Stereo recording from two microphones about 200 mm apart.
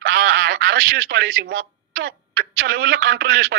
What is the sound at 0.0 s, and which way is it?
Telephone, 65° right (ahead or behind).